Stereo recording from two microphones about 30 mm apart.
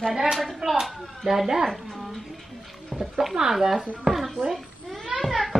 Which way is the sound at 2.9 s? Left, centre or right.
Centre.